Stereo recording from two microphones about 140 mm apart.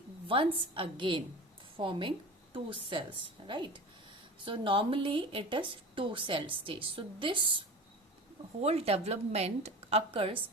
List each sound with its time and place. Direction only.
0.3 s a woman's voice: 40° right (ahead or behind)
8.6 s a woman's voice: 45° right (ahead or behind)